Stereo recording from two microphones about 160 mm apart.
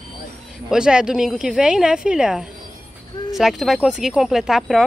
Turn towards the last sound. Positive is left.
turn(degrees=0)  # may be behind; listen again after turning